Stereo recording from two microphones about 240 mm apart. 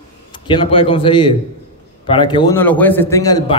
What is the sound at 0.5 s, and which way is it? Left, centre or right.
A man's voice, left.